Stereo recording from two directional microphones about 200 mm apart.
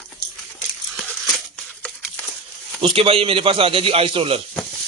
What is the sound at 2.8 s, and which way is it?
Speech, 25° right (ahead or behind).